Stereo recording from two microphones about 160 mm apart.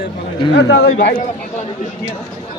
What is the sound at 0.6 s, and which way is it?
Speech, 90° left.